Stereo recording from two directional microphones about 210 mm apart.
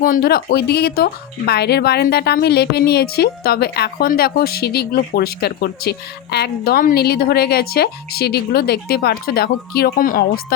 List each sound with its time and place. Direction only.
0.0 s speech: 45° left (ahead or behind)